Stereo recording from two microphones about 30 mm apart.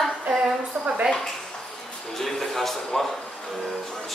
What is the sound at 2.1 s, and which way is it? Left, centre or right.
Speech, centre.